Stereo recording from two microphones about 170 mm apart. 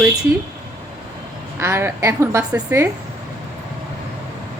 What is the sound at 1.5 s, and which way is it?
A woman's voice, 15° right (ahead or behind).